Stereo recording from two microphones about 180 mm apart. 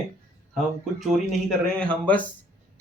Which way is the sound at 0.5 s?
Centre (ahead or behind).